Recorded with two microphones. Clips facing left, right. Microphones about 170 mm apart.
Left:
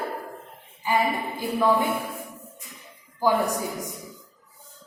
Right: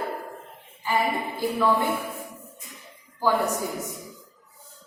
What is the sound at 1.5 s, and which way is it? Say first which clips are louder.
Speech: left 2 dB; 15° left (ahead or behind).